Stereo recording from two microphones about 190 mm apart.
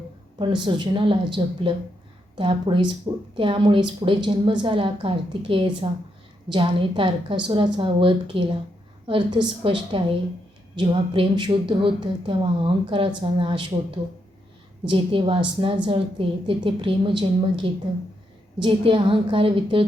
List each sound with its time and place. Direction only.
0.3 s a woman's voice: 25° right (ahead or behind)
14.8 s a woman's voice: 25° right (ahead or behind)